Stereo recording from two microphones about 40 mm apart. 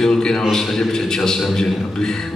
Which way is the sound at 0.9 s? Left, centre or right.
Centre.